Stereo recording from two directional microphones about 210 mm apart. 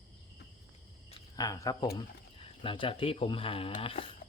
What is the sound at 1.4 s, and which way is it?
Speech, 15° left (ahead or behind).